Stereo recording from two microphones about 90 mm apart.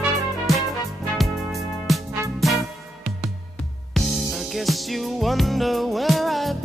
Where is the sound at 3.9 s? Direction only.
Centre (ahead or behind).